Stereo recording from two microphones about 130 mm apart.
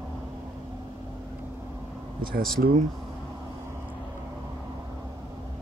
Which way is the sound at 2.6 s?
90° right.